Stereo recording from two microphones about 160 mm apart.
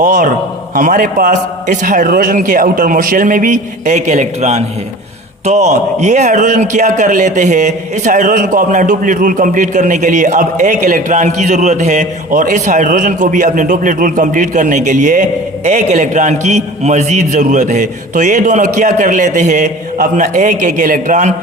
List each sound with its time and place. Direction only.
0.0 s a man's voice: 50° right (ahead or behind)